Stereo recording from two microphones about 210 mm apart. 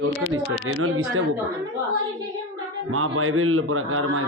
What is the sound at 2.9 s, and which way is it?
A man's voice, 85° right.